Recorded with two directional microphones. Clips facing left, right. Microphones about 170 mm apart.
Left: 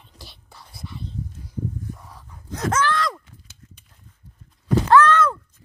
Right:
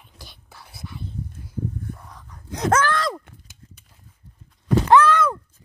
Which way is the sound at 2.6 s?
50° right (ahead or behind).